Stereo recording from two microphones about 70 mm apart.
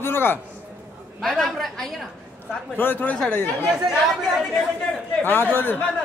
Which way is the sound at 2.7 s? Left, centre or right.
Left.